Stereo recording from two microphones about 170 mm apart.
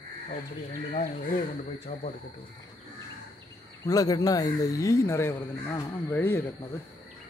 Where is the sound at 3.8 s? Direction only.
20° left (ahead or behind).